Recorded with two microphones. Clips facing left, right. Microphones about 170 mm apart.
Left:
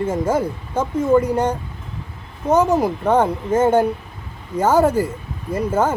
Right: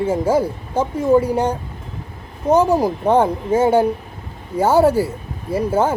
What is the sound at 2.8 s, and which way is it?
Speech, 30° right (ahead or behind).